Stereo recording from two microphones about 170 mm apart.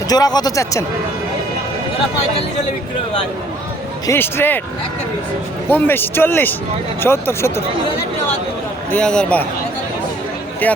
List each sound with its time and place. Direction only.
0.1 s speech: 25° left (ahead or behind)
4.0 s speech: 15° left (ahead or behind)
5.6 s speech: 10° left (ahead or behind)
8.9 s a man's voice: 5° left (ahead or behind)